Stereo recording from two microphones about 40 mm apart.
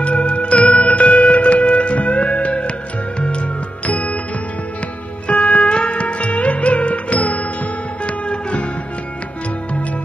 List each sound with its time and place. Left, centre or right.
0.0 s music: left
5.3 s music: left